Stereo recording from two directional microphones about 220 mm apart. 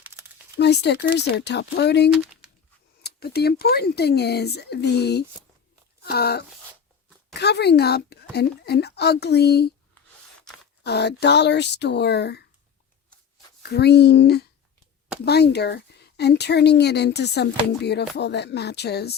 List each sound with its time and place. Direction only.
0.6 s speech: 50° left (ahead or behind)
2.0 s speech: 5° right (ahead or behind)
3.0 s speech: 45° left (ahead or behind)
10.8 s speech: 50° left (ahead or behind)
13.6 s speech: 45° left (ahead or behind)